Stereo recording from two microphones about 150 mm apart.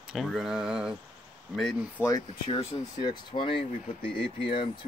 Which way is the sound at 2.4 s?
35° left (ahead or behind).